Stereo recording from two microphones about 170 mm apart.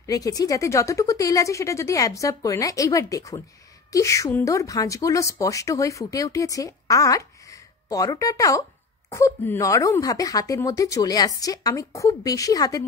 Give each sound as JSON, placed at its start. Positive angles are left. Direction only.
{"t": 0.0, "sound": "speech", "side_deg": 20}